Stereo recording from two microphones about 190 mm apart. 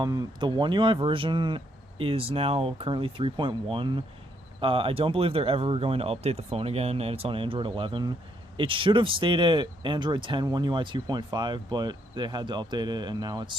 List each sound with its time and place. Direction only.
0.0 s speech: 20° right (ahead or behind)